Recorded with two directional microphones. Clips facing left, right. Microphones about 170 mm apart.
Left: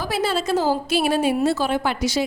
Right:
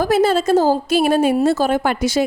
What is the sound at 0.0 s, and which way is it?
A woman's voice, 45° right (ahead or behind).